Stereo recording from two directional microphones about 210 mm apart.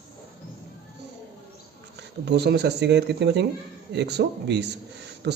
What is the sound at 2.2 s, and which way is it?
Speech, 50° right (ahead or behind).